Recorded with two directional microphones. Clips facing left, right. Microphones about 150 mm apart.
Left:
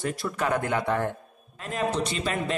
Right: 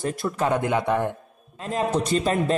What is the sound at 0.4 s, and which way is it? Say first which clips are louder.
Speech: right 3 dB; 20° right (ahead or behind).